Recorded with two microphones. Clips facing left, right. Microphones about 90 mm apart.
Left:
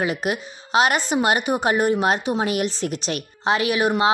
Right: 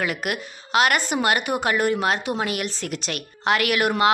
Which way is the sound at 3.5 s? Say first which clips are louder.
Left 1 dB; 25° left (ahead or behind).